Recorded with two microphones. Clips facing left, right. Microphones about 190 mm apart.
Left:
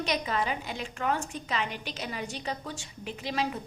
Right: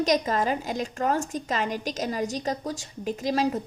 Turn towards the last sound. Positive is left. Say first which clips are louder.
# right 7 dB
turn(degrees=-40)  # may be behind; listen again after turning